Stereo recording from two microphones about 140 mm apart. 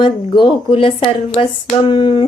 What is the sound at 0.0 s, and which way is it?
Speech, 35° left (ahead or behind).